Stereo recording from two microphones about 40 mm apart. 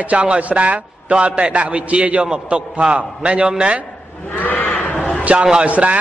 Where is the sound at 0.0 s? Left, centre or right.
Right.